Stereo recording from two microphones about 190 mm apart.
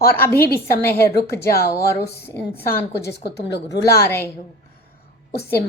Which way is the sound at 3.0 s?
60° left (ahead or behind).